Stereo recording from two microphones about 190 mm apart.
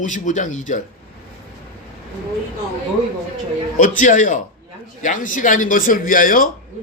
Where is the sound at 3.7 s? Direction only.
45° left (ahead or behind).